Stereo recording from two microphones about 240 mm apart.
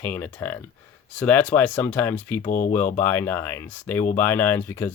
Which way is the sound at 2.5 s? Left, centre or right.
Left.